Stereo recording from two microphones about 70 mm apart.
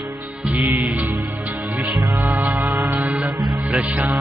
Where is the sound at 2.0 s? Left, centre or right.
Right.